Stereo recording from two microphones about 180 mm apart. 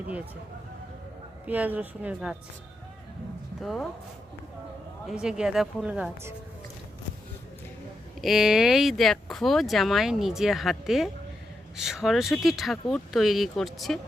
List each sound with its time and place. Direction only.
1.5 s a woman's voice: 10° right (ahead or behind)
3.6 s speech: centre (ahead or behind)
5.0 s speech: 5° right (ahead or behind)
8.2 s speech: centre (ahead or behind)